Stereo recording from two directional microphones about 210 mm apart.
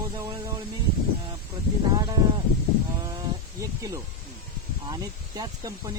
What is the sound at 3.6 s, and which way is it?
Speech, 15° right (ahead or behind).